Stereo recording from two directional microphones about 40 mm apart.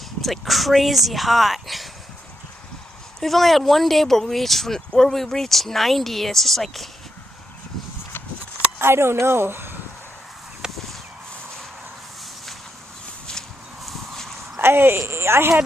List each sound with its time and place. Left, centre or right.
0.2 s speech: centre
3.2 s speech: centre
8.8 s a woman's voice: right
10.6 s a sound: centre
13.8 s horse: centre
14.6 s speech: right